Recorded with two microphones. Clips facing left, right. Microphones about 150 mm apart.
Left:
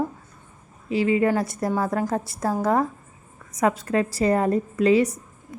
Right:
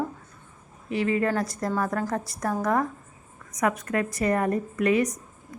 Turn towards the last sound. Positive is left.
turn(degrees=30)  # may be behind; listen again after turning